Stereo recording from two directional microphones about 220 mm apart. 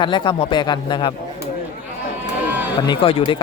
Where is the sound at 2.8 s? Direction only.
20° left (ahead or behind).